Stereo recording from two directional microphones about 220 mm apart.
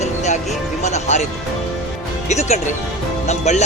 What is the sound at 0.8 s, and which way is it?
Speech, 30° left (ahead or behind).